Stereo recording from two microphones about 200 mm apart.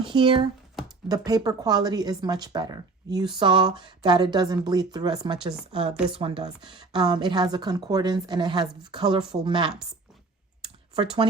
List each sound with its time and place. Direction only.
0.1 s speech: 25° right (ahead or behind)
5.9 s speech: 5° right (ahead or behind)
6.1 s speech: 25° right (ahead or behind)
10.9 s speech: 25° right (ahead or behind)